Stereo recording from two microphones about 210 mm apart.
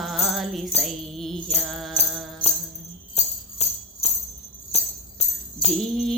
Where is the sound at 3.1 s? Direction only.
30° left (ahead or behind).